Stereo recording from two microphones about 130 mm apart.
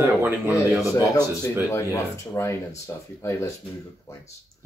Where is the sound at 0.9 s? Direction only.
25° left (ahead or behind).